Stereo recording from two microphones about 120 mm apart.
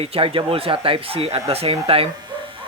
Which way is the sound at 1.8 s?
50° right (ahead or behind).